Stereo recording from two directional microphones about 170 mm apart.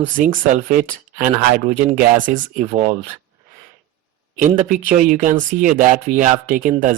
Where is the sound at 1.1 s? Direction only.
55° right (ahead or behind).